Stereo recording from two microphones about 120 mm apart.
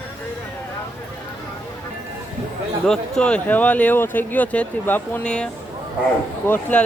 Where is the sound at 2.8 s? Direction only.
5° left (ahead or behind).